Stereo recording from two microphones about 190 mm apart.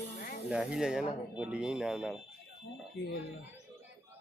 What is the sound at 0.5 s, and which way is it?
Speech, 5° right (ahead or behind).